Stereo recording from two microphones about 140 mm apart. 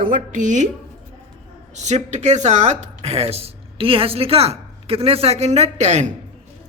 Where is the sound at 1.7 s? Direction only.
55° right (ahead or behind).